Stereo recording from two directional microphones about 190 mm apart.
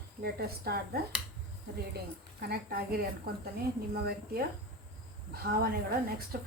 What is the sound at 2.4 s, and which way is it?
A woman's voice, 55° right (ahead or behind).